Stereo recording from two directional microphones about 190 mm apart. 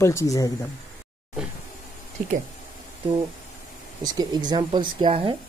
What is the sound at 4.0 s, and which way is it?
Speech, 20° right (ahead or behind).